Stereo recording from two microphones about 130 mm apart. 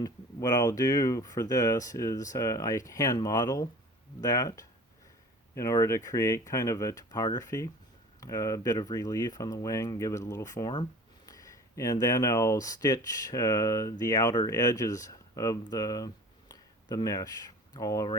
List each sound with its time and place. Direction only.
0.0 s speech: 30° left (ahead or behind)